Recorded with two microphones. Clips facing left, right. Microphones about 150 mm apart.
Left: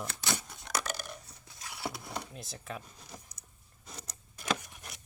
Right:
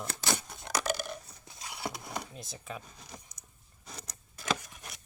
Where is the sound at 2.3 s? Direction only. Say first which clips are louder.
Even; centre (ahead or behind).